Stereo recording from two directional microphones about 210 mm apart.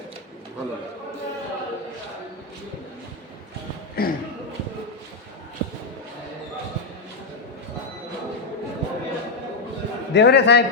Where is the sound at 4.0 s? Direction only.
45° left (ahead or behind).